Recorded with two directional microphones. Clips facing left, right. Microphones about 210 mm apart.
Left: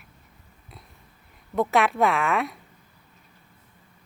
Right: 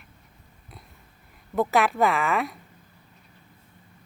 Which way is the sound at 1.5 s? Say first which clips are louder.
Even; centre (ahead or behind).